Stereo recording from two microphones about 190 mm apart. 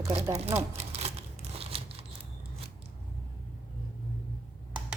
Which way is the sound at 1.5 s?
30° right (ahead or behind).